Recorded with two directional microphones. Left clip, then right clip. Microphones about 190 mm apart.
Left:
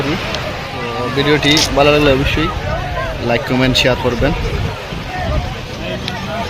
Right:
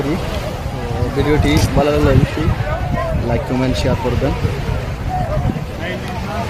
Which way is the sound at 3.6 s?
Centre (ahead or behind).